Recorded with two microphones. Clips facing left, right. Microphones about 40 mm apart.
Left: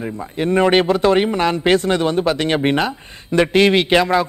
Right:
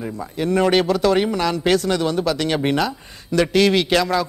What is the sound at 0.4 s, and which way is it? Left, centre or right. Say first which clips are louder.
A man's voice: left 3 dB; left.